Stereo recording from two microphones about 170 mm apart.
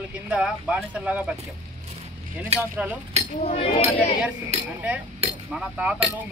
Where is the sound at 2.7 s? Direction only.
5° right (ahead or behind).